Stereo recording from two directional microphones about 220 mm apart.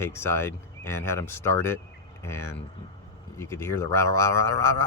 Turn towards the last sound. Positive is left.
turn(degrees=10)  # may be behind; listen again after turning